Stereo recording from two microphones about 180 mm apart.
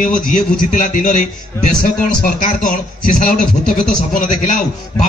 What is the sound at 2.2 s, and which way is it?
A man's voice, 45° left (ahead or behind).